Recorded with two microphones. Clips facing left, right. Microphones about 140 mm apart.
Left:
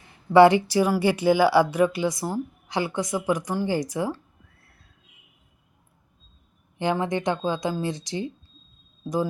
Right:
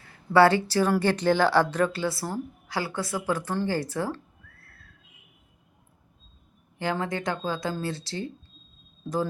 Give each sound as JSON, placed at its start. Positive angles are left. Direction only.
{"t": 0.0, "sound": "speech", "side_deg": 20}
{"t": 4.6, "sound": "a sound", "side_deg": 20}
{"t": 6.7, "sound": "speech", "side_deg": 20}